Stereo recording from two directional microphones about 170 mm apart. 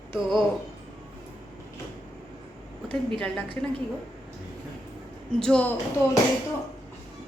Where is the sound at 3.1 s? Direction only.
5° left (ahead or behind).